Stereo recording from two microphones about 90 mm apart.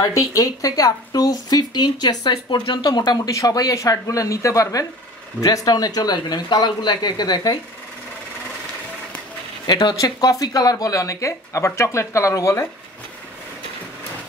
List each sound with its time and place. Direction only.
0.0 s speech: 40° left (ahead or behind)
3.3 s speech: 40° left (ahead or behind)
9.7 s speech: 50° left (ahead or behind); by 12.6 s 35° left (ahead or behind)